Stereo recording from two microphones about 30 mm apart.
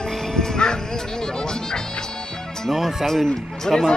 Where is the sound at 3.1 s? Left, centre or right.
Centre.